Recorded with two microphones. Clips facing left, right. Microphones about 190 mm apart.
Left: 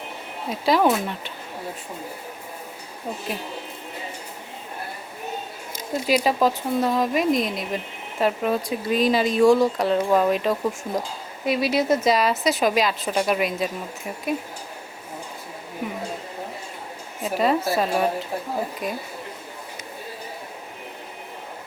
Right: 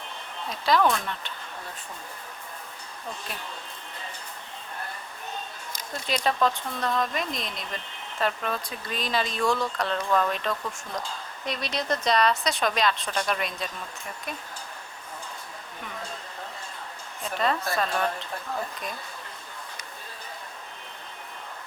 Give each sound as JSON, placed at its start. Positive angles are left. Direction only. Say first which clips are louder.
{"t": 0.5, "sound": "a woman's voice", "louder": "left 4 dB", "side_deg": 5}
{"t": 5.9, "sound": "a woman's voice", "louder": "left 7 dB", "side_deg": 5}
{"t": 9.6, "sound": "speech", "louder": "left 9 dB", "side_deg": 25}
{"t": 10.1, "sound": "a woman's voice", "louder": "left 6 dB", "side_deg": 10}
{"t": 17.2, "sound": "speech", "louder": "left 6 dB", "side_deg": 5}